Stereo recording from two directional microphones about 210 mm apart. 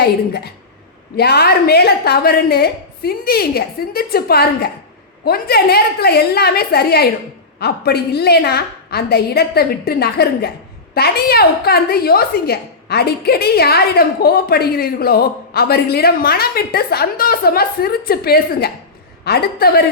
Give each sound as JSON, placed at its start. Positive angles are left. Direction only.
{"t": 0.0, "sound": "a woman's voice", "side_deg": 50}